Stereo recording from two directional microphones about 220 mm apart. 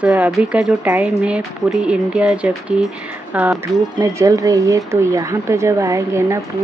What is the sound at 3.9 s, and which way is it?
Speech, 15° right (ahead or behind).